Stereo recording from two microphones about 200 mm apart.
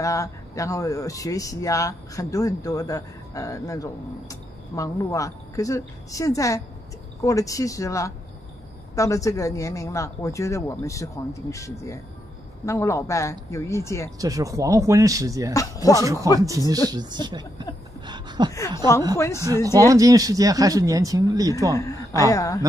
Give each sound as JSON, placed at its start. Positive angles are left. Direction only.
{"t": 0.0, "sound": "speech", "side_deg": 15}
{"t": 14.1, "sound": "speech", "side_deg": -15}
{"t": 15.5, "sound": "speech", "side_deg": 15}
{"t": 16.0, "sound": "speech", "side_deg": -15}
{"t": 18.0, "sound": "a sound", "side_deg": -20}
{"t": 18.8, "sound": "speech", "side_deg": -20}
{"t": 19.1, "sound": "speech", "side_deg": 15}
{"t": 19.4, "sound": "speech", "side_deg": -15}
{"t": 21.7, "sound": "a sound", "side_deg": 15}
{"t": 22.3, "sound": "speech", "side_deg": 15}